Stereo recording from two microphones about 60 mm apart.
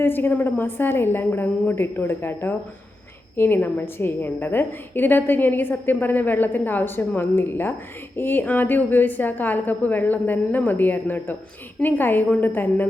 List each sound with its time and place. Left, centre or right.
0.0 s a woman's voice: left